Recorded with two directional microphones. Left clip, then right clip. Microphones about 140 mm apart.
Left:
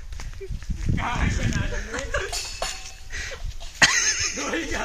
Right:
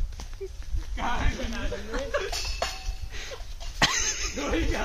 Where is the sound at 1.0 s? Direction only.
90° right.